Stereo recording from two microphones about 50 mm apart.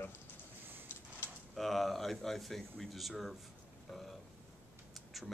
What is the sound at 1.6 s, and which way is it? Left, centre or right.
Speech, centre.